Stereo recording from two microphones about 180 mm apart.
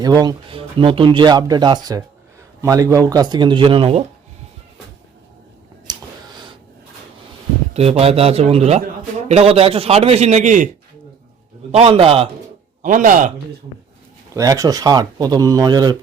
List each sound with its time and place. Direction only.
0.0 s speech: 20° right (ahead or behind)
5.9 s a sound: 25° right (ahead or behind)
7.7 s a man's voice: 35° right (ahead or behind)
11.7 s a man's voice: 35° right (ahead or behind)
12.8 s speech: 45° right (ahead or behind)
14.3 s speech: 20° right (ahead or behind)